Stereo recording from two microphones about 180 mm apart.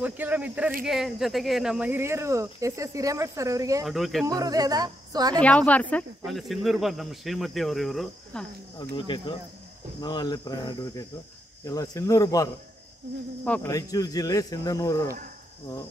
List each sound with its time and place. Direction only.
0.0 s speech: 10° right (ahead or behind)
3.8 s speech: centre (ahead or behind)
4.3 s speech: 20° right (ahead or behind)
5.4 s speech: 5° left (ahead or behind)
8.9 s speech: 25° left (ahead or behind)
13.4 s speech: 5° left (ahead or behind)
13.7 s speech: 20° left (ahead or behind)